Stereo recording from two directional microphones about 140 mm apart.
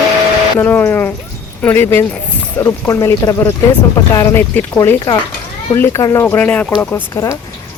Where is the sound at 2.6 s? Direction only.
20° left (ahead or behind).